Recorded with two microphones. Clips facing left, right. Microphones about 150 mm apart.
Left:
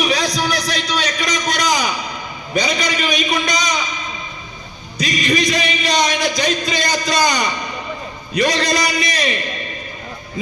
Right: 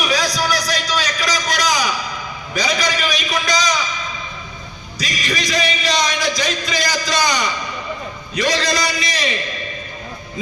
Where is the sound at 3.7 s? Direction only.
30° left (ahead or behind).